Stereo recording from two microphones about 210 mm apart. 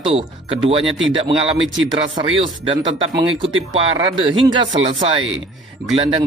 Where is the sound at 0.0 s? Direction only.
25° right (ahead or behind).